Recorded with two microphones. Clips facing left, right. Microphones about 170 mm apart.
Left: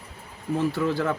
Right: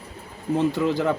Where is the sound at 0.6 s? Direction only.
20° right (ahead or behind).